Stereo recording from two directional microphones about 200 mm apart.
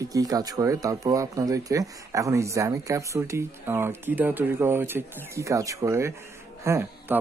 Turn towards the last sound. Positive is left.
turn(degrees=-15)  # may be behind; listen again after turning